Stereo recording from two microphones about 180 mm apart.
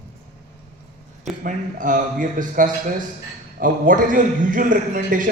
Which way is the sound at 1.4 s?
45° right (ahead or behind).